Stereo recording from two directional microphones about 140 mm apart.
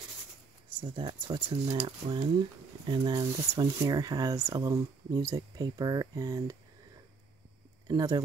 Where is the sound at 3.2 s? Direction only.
20° right (ahead or behind).